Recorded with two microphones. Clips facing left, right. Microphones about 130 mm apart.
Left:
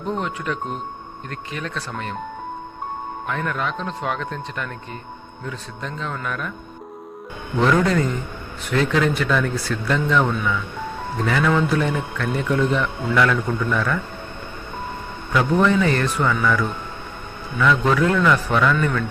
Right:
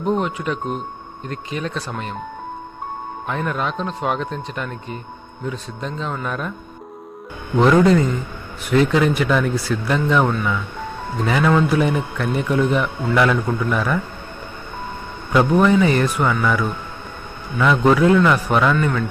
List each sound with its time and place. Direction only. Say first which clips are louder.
0.0 s a man's voice: right 5 dB; 15° right (ahead or behind)
3.2 s speech: right 2 dB; 20° right (ahead or behind)
7.5 s a man's voice: right 5 dB; 20° right (ahead or behind)
15.5 s a man's voice: right 2 dB; 15° right (ahead or behind)